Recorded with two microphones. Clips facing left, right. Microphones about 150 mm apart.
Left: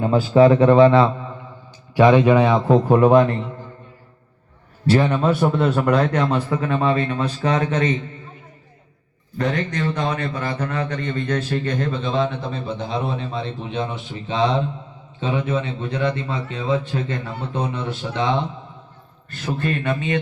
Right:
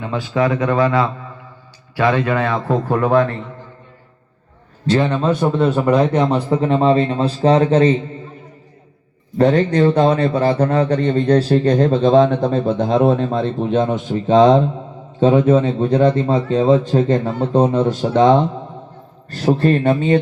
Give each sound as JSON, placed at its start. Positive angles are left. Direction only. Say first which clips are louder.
{"t": 0.0, "sound": "a man's voice", "louder": "left 5 dB", "side_deg": 40}
{"t": 5.0, "sound": "a man's voice", "louder": "right 1 dB", "side_deg": -25}
{"t": 9.4, "sound": "a man's voice", "louder": "right 10 dB", "side_deg": -30}